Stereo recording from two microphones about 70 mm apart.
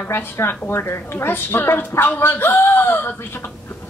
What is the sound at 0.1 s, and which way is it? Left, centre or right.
A woman's voice, left.